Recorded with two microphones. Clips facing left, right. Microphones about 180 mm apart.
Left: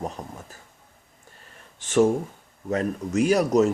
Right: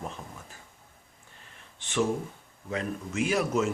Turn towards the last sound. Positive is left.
turn(degrees=40)  # may be behind; listen again after turning